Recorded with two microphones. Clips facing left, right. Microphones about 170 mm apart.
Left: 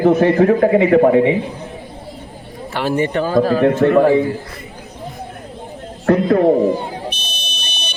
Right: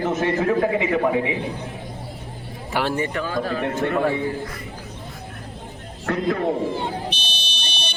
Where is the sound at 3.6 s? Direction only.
50° left (ahead or behind).